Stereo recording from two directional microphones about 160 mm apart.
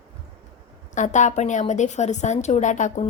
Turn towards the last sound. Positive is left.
turn(degrees=50)  # may be behind; listen again after turning